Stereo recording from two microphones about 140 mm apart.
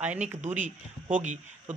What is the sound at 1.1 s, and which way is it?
Speech, 60° right (ahead or behind).